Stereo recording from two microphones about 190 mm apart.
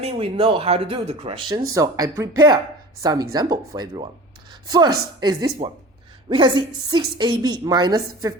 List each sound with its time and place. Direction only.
0.0 s a woman's voice: 30° right (ahead or behind)
5.2 s a woman's voice: 20° right (ahead or behind)